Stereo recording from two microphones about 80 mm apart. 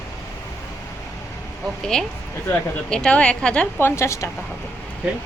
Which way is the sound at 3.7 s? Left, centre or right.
Left.